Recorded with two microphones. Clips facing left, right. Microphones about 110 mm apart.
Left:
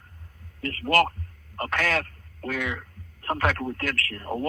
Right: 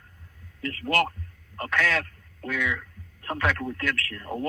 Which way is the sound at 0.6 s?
50° left (ahead or behind).